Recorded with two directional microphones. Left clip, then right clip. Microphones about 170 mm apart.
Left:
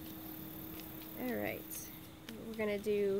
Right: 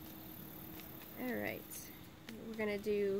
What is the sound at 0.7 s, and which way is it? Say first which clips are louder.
Speech: left 3 dB; 15° right (ahead or behind).